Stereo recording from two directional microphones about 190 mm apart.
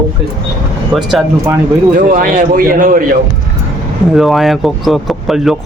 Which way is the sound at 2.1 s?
50° right (ahead or behind).